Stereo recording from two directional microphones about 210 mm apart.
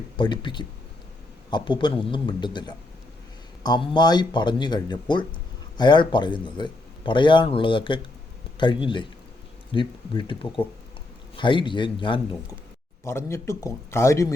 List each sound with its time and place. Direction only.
0.2 s speech: 20° left (ahead or behind)
13.1 s speech: 10° left (ahead or behind)